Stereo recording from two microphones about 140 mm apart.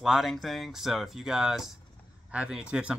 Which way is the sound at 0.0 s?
Centre (ahead or behind).